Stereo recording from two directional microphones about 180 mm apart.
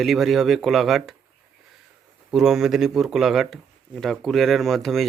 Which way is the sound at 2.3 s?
Centre (ahead or behind).